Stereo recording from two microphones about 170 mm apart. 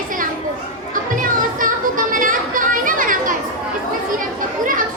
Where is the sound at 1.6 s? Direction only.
50° right (ahead or behind).